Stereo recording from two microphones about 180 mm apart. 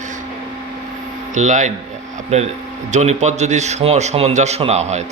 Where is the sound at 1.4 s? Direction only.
40° right (ahead or behind).